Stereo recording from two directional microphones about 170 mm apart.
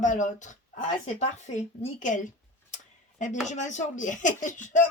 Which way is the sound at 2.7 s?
45° left (ahead or behind).